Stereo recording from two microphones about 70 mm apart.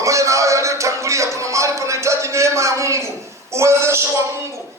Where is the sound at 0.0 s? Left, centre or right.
Right.